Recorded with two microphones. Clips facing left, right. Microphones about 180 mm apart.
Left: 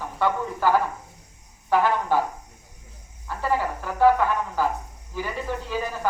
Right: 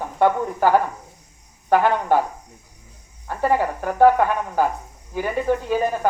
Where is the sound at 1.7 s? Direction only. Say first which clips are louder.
Right 4 dB; 55° right (ahead or behind).